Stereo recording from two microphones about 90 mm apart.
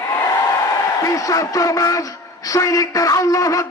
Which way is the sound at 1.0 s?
40° left (ahead or behind).